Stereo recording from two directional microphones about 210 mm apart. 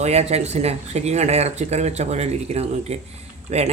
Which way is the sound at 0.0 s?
30° right (ahead or behind).